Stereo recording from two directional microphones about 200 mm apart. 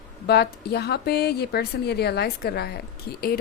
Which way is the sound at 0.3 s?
55° left (ahead or behind).